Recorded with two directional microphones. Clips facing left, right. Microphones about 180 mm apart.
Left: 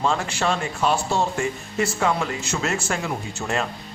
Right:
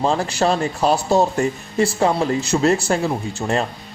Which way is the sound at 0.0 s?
35° right (ahead or behind).